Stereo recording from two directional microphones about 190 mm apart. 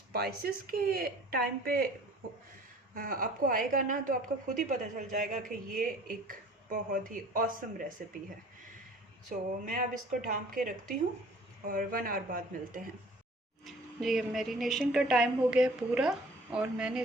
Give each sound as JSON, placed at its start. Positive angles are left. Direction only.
{"t": 0.1, "sound": "a woman's voice", "side_deg": -55}
{"t": 2.9, "sound": "a woman's voice", "side_deg": -45}
{"t": 9.3, "sound": "a woman's voice", "side_deg": -45}
{"t": 13.7, "sound": "a woman's voice", "side_deg": 0}